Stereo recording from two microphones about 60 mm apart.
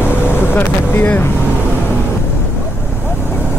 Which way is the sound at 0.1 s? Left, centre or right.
Left.